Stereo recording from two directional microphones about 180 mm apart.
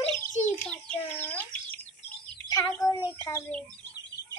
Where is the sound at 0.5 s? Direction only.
10° left (ahead or behind).